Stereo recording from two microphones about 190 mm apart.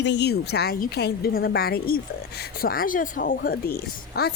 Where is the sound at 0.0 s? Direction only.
65° left (ahead or behind).